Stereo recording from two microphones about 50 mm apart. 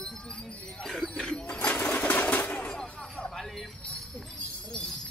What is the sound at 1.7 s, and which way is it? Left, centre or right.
Sewing machine, left.